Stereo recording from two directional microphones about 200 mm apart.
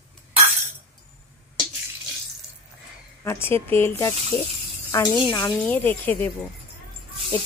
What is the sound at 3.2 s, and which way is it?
Speech, 10° left (ahead or behind).